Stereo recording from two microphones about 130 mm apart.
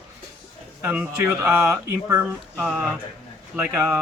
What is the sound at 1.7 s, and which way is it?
Speech, 20° right (ahead or behind).